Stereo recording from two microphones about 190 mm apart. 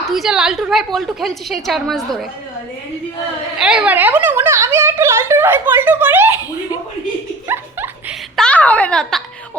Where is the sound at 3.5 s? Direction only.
5° right (ahead or behind).